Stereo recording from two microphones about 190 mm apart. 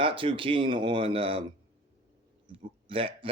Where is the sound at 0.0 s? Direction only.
30° right (ahead or behind).